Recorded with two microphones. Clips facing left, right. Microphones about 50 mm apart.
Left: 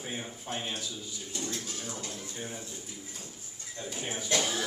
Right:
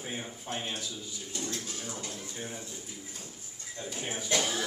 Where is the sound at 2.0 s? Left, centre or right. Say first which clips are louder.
Even; centre.